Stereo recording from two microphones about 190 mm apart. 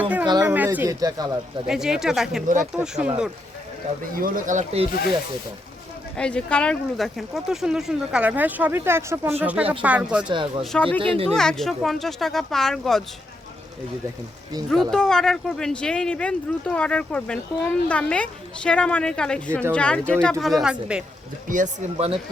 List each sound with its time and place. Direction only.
0.0 s a sound: 10° right (ahead or behind)
1.0 s speech: 20° right (ahead or behind)
1.6 s speech: 5° right (ahead or behind)
4.1 s speech: 45° right (ahead or behind)
6.1 s speech: 5° left (ahead or behind)
10.2 s speech: 25° right (ahead or behind)
10.6 s speech: 5° left (ahead or behind)
10.9 s speech: 30° right (ahead or behind)
11.3 s speech: centre (ahead or behind)
14.7 s speech: centre (ahead or behind)
21.5 s speech: 40° right (ahead or behind)